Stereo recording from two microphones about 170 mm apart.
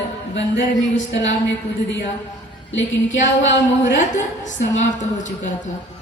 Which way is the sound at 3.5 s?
90° left.